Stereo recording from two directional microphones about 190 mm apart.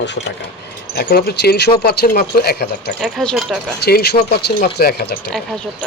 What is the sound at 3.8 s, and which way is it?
Speech, 60° left (ahead or behind).